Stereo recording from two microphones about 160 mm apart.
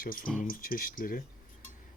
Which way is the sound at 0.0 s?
60° left (ahead or behind).